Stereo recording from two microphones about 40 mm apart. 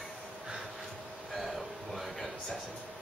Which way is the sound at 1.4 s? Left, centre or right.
Centre.